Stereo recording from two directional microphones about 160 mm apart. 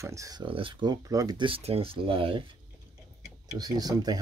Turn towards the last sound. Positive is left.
turn(degrees=-25)  # may be behind; listen again after turning